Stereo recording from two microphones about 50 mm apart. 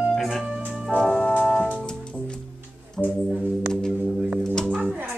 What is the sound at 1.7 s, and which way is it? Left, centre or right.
Music, centre.